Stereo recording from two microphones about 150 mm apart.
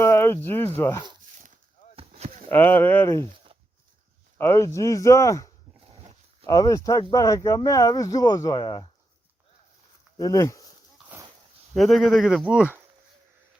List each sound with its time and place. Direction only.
0.0 s speech: 15° left (ahead or behind)
2.0 s chop: 45° right (ahead or behind)
2.5 s speech: 15° left (ahead or behind)
4.4 s speech: 15° left (ahead or behind)
10.2 s speech: 25° left (ahead or behind)
11.7 s speech: centre (ahead or behind)